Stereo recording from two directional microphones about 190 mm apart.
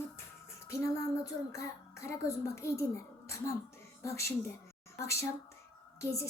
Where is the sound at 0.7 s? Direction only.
15° left (ahead or behind).